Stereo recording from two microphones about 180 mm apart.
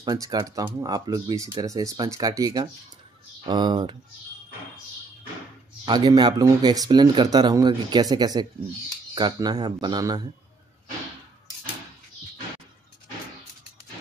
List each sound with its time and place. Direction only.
0.0 s speech: 20° right (ahead or behind)
5.9 s speech: 25° right (ahead or behind)